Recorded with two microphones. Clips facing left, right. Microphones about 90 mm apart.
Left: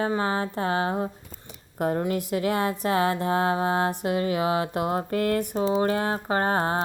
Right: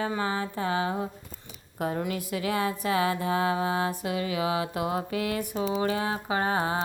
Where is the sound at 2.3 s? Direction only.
45° left (ahead or behind).